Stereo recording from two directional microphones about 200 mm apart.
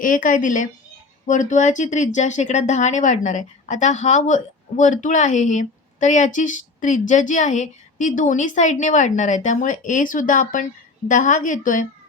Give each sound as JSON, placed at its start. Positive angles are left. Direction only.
{"t": 0.0, "sound": "speech", "side_deg": 40}